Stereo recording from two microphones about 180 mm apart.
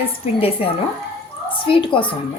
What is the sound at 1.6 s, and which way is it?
Speech, 30° left (ahead or behind).